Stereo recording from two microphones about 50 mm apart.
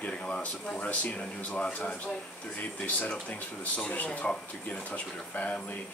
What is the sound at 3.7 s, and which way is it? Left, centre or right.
Speech, left.